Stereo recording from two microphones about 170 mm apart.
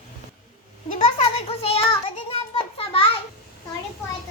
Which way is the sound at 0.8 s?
50° left (ahead or behind).